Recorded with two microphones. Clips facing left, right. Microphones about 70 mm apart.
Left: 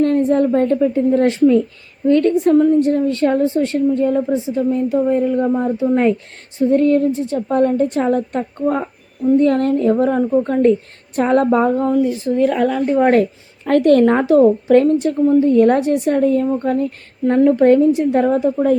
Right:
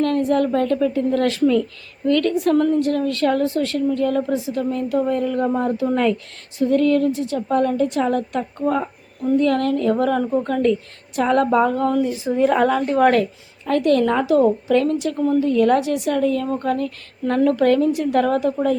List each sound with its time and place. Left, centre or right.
0.0 s a woman's voice: left
5.4 s speech: centre
6.6 s a woman's voice: left
11.9 s speech: centre
12.2 s a woman's voice: centre
12.8 s speech: centre
13.7 s a woman's voice: left